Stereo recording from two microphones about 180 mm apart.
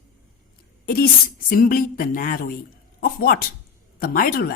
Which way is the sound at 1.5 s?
50° left (ahead or behind).